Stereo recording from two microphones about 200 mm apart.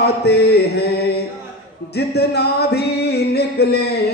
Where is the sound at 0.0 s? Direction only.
55° left (ahead or behind).